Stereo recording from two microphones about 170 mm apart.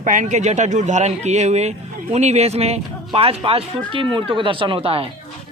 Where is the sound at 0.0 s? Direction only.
50° right (ahead or behind).